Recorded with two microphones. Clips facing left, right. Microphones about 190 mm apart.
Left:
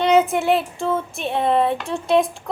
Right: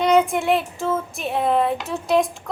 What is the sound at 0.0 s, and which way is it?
Child singing, centre (ahead or behind).